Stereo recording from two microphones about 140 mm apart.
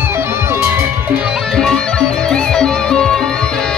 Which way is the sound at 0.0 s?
20° right (ahead or behind).